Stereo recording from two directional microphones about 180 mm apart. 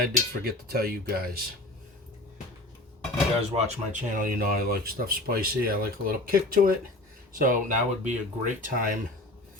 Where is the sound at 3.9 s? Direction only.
50° right (ahead or behind).